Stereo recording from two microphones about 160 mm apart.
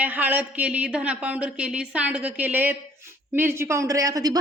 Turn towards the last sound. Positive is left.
turn(degrees=-20)  # may be behind; listen again after turning